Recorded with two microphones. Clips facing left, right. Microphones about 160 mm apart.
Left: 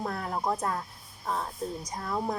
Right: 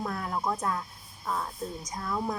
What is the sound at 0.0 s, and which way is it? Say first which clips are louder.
Speech: even; 30° left (ahead or behind).